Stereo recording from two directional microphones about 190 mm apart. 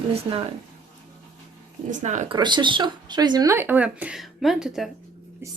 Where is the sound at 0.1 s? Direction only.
30° right (ahead or behind).